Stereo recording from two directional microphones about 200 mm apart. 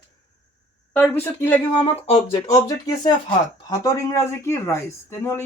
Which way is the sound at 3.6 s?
15° left (ahead or behind).